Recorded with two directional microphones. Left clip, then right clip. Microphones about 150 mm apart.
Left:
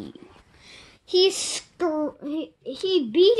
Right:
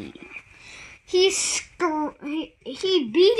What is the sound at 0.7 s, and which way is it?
A child's voice, 40° right (ahead or behind).